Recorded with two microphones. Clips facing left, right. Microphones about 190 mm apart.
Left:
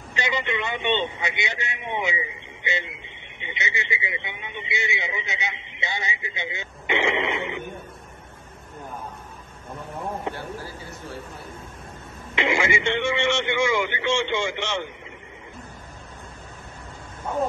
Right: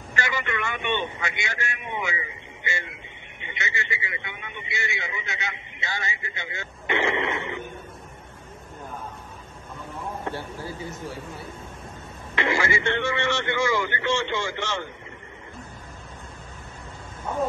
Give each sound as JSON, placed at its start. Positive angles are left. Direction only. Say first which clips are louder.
{"t": 0.1, "sound": "a man's voice", "louder": "left 2 dB", "side_deg": 20}
{"t": 10.3, "sound": "a sound", "louder": "even", "side_deg": 15}
{"t": 12.4, "sound": "a man's voice", "louder": "left 1 dB", "side_deg": 20}